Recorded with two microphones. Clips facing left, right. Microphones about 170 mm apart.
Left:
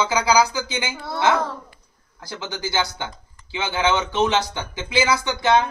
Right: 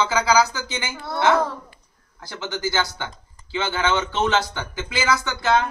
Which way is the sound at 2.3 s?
15° left (ahead or behind).